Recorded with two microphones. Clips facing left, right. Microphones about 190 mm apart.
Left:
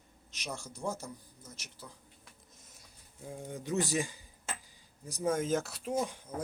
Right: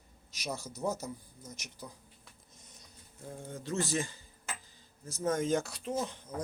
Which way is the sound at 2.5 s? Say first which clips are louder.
Right 2 dB; 5° left (ahead or behind).